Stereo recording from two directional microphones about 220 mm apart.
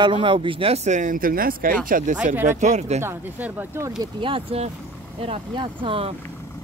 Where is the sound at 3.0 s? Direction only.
10° right (ahead or behind).